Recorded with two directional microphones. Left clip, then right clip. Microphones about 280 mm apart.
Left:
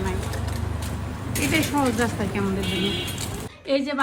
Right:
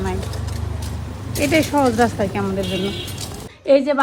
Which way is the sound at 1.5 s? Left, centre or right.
Centre.